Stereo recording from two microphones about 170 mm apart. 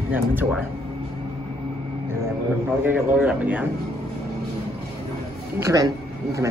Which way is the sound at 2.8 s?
10° right (ahead or behind).